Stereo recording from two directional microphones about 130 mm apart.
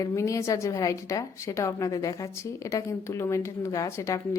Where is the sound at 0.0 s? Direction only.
25° left (ahead or behind).